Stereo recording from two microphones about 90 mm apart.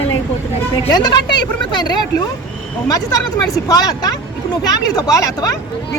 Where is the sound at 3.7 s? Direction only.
45° left (ahead or behind).